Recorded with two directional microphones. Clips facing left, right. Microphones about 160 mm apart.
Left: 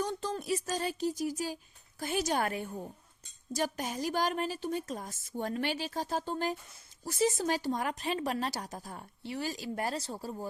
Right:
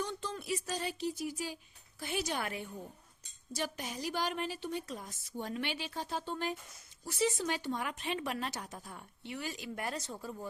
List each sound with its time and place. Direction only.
0.0 s a woman's voice: 40° left (ahead or behind)